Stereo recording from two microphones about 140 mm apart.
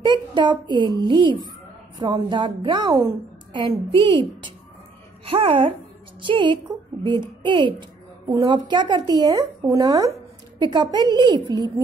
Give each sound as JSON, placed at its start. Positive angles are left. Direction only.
{"t": 0.0, "sound": "a woman's voice", "side_deg": -35}